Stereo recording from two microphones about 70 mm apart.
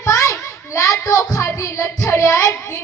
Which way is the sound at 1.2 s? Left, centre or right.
Left.